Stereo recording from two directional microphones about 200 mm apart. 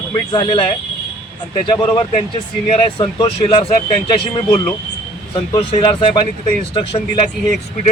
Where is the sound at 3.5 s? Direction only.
30° left (ahead or behind).